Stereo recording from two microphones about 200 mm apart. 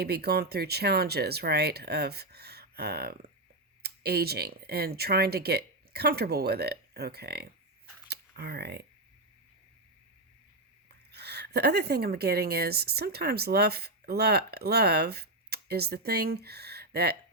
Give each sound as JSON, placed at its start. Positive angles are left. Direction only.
{"t": 0.0, "sound": "speech", "side_deg": -50}
{"t": 11.1, "sound": "speech", "side_deg": -55}